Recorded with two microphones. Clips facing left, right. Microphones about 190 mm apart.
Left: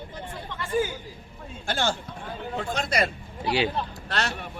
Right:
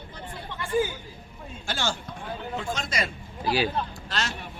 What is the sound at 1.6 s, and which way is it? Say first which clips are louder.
Speech: left 3 dB; 55° left (ahead or behind).